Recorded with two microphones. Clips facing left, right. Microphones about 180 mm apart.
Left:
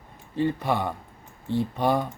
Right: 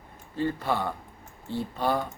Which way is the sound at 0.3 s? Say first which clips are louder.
Left 3 dB; 15° left (ahead or behind).